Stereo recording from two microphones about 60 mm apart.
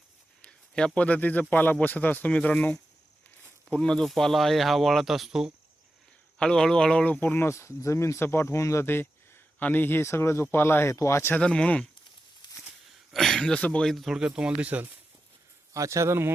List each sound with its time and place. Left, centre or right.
0.9 s speech: left
3.8 s speech: centre
6.4 s speech: centre; by 7.4 s left
7.4 s speech: left
8.5 s speech: left
8.8 s a sound: left
9.6 s speech: left
10.0 s speech: left
10.9 s speech: left
11.3 s speech: centre
13.1 s speech: centre
13.8 s speech: centre
14.2 s speech: centre
15.7 s speech: right